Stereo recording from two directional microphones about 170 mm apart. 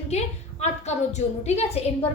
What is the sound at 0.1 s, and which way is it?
A woman's voice, 40° left (ahead or behind).